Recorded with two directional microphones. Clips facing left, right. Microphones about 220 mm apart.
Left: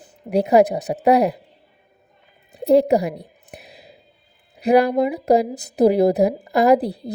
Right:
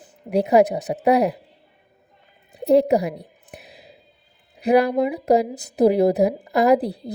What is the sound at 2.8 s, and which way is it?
Speech, 35° left (ahead or behind).